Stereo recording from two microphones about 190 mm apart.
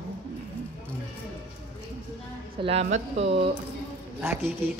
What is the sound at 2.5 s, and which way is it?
Speech, 30° right (ahead or behind).